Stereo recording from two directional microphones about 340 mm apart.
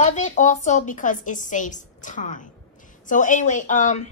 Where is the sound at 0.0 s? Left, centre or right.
Left.